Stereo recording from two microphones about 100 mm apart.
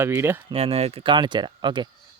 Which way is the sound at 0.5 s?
85° right.